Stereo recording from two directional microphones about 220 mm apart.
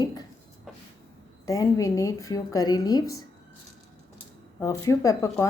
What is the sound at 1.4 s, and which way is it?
Speech, 15° left (ahead or behind).